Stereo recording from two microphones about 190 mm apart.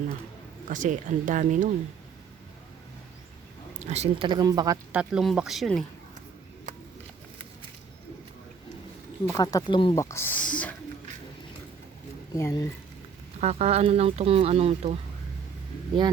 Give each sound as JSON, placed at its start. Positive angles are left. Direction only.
{"t": 0.7, "sound": "speech", "side_deg": -40}
{"t": 3.8, "sound": "speech", "side_deg": -35}
{"t": 4.9, "sound": "speech", "side_deg": -5}
{"t": 9.2, "sound": "speech", "side_deg": 20}
{"t": 12.4, "sound": "speech", "side_deg": 15}
{"t": 13.4, "sound": "speech", "side_deg": -35}